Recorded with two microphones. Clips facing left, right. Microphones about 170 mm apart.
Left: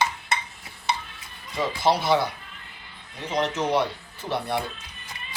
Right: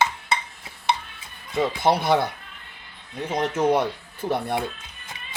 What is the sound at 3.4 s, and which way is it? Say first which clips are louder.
Speech: right 3 dB; 50° right (ahead or behind).